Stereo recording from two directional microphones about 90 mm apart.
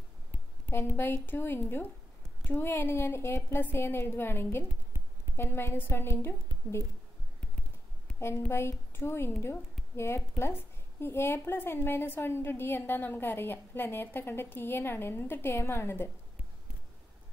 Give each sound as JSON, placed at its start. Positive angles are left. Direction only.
{"t": 0.7, "sound": "a woman's voice", "side_deg": 25}
{"t": 8.5, "sound": "a woman's voice", "side_deg": 25}